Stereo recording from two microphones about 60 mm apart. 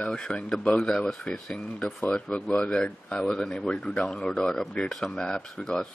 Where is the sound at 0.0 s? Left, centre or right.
Centre.